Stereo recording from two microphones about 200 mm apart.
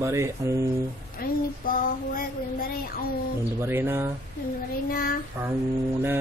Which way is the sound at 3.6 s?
10° right (ahead or behind).